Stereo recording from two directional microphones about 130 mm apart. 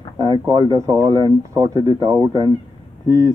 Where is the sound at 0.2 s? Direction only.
30° right (ahead or behind).